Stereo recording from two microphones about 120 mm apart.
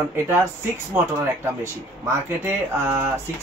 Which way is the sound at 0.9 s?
20° right (ahead or behind).